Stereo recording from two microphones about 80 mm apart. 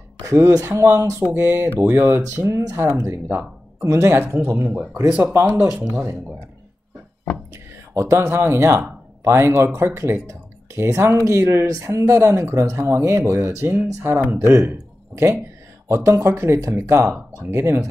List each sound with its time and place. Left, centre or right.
0.2 s speech: right
7.5 s speech: right
15.9 s speech: right